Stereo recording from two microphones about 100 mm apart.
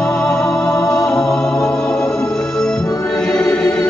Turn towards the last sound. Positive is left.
turn(degrees=10)  # may be behind; listen again after turning